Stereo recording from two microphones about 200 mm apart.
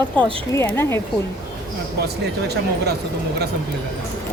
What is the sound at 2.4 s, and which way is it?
Speech, 55° right (ahead or behind).